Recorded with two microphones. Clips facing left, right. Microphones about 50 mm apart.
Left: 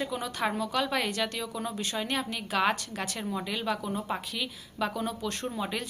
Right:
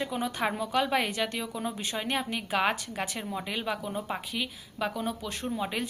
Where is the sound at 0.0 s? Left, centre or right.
Centre.